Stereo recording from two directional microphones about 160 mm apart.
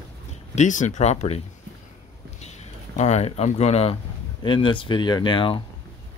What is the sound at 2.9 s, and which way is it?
Speech, 45° left (ahead or behind).